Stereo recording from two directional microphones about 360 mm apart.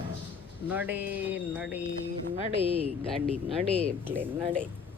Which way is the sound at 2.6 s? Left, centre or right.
Centre.